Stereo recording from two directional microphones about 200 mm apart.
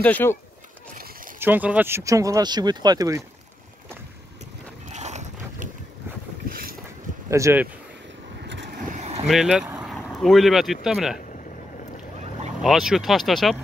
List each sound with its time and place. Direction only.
0.0 s speech: 10° left (ahead or behind)
0.9 s a sound: 45° right (ahead or behind)
1.4 s speech: 10° right (ahead or behind)
4.8 s a sound: 35° right (ahead or behind)
6.5 s boat: 45° right (ahead or behind)
7.2 s speech: 15° right (ahead or behind)
8.5 s vehicle: 65° right (ahead or behind)
8.8 s vehicle: 35° right (ahead or behind)
9.2 s speech: centre (ahead or behind)
12.6 s speech: centre (ahead or behind)